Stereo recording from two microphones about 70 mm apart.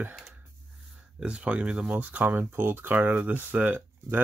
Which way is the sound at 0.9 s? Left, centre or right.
Centre.